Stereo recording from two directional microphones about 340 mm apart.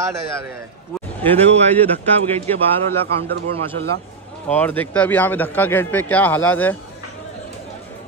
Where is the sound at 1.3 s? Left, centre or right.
Centre.